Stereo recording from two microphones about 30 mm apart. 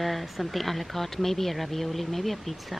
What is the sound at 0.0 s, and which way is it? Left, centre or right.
Speech, centre.